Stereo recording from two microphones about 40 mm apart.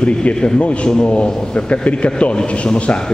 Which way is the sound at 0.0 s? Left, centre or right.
Left.